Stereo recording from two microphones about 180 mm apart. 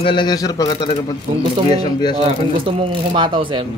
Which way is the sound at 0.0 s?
25° left (ahead or behind).